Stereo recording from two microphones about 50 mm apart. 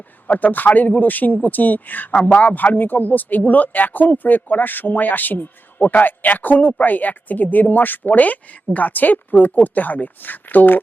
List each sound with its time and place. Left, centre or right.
0.3 s speech: left